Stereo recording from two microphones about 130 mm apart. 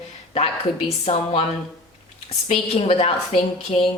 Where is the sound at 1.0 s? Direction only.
55° left (ahead or behind).